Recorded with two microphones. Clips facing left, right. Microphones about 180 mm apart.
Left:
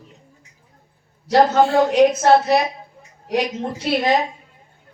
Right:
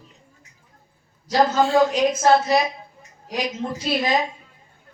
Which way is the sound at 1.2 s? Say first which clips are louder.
Left 4 dB; 65° left (ahead or behind).